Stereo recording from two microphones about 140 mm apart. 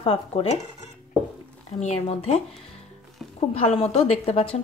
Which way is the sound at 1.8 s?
50° left (ahead or behind).